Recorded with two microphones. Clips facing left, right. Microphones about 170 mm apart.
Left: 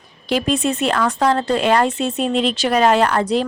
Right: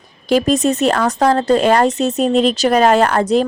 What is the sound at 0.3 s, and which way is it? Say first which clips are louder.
Speech: right 5 dB; 40° right (ahead or behind).